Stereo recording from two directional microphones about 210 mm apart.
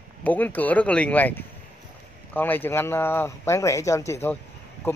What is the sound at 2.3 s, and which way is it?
Speech, 10° left (ahead or behind).